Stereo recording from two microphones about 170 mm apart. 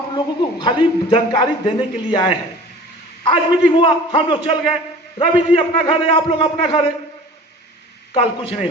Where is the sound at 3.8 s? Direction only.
30° left (ahead or behind).